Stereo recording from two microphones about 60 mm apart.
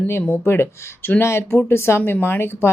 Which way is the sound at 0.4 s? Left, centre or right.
Left.